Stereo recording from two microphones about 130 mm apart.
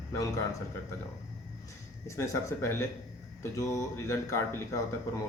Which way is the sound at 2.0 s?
25° left (ahead or behind).